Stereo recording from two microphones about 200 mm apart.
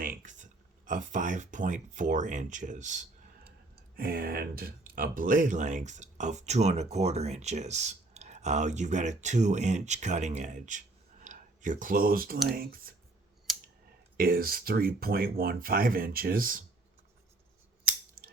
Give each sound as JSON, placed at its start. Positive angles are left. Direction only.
{"t": 0.0, "sound": "a sound", "side_deg": -40}
{"t": 0.9, "sound": "speech", "side_deg": -40}
{"t": 3.9, "sound": "speech", "side_deg": -50}
{"t": 14.2, "sound": "speech", "side_deg": -45}
{"t": 18.2, "sound": "scissors", "side_deg": -50}